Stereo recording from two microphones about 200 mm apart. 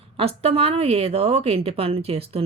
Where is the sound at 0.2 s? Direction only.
30° right (ahead or behind).